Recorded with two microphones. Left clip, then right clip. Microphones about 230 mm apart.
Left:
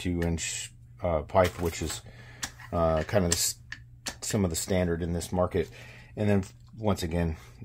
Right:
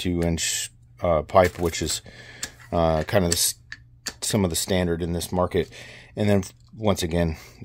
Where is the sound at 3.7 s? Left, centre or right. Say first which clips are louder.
Right 2 dB; centre.